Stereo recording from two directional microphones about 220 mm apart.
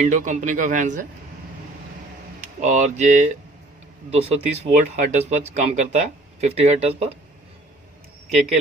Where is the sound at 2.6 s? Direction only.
35° right (ahead or behind).